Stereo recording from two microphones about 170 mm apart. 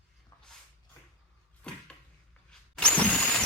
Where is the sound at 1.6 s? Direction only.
5° left (ahead or behind).